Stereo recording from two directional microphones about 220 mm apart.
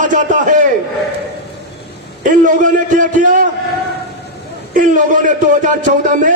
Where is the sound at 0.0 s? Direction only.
35° right (ahead or behind).